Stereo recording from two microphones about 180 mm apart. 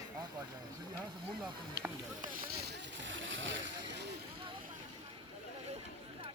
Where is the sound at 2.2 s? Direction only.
65° right (ahead or behind); by 4.0 s 90° right.